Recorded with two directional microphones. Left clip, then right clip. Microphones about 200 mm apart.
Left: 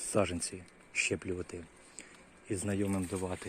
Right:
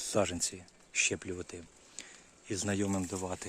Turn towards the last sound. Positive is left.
turn(degrees=-20)  # may be behind; listen again after turning